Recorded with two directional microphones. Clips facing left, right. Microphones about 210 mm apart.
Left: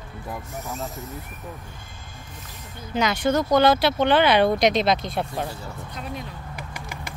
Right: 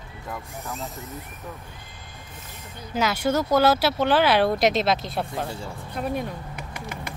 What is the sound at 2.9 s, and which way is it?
Speech, 5° right (ahead or behind).